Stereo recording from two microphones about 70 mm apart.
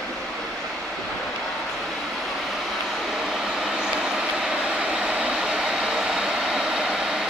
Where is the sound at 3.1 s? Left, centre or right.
Centre.